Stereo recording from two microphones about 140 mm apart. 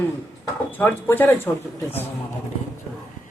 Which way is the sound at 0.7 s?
15° left (ahead or behind).